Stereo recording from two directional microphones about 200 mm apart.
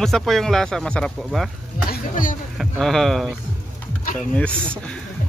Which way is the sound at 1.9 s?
40° left (ahead or behind).